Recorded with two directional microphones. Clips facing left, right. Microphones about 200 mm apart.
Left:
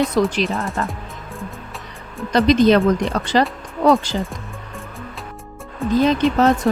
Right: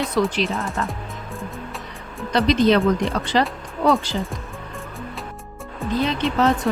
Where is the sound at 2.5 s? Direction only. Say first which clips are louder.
Left 3 dB; 45° left (ahead or behind).